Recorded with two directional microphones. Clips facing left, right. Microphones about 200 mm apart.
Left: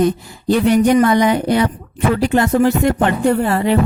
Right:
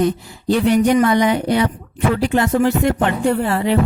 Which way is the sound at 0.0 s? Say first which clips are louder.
Left 2 dB; 45° left (ahead or behind).